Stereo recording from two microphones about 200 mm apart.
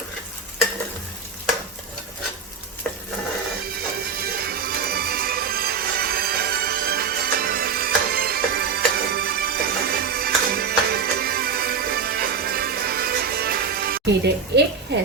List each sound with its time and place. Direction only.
4.2 s music: 50° right (ahead or behind)
14.9 s speech: 60° right (ahead or behind)